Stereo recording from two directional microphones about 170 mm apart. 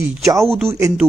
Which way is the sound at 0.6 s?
15° right (ahead or behind).